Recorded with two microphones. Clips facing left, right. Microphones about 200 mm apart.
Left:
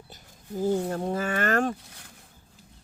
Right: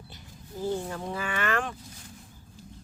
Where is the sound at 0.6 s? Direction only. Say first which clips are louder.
Left 5 dB; 40° left (ahead or behind).